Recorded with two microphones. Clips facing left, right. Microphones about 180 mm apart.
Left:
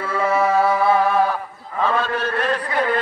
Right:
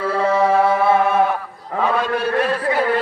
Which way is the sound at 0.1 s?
30° right (ahead or behind).